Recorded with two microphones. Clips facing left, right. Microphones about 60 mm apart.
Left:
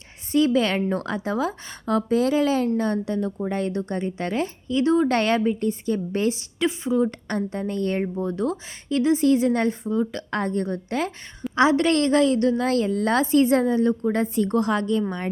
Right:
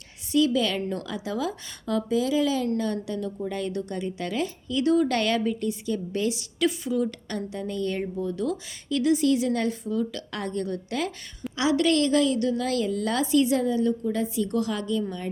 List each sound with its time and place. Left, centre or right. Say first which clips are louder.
0.3 s a woman's voice: left 3 dB; left